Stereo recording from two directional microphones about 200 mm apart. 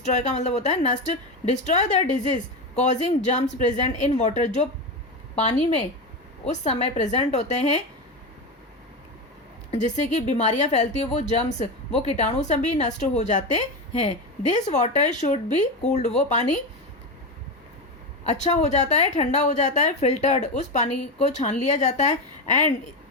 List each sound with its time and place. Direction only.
0.0 s a woman's voice: 35° left (ahead or behind)
9.7 s a woman's voice: 35° left (ahead or behind)
18.2 s a woman's voice: 35° left (ahead or behind)